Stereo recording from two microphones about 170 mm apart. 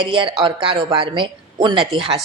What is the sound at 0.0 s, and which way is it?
Speech, 30° right (ahead or behind).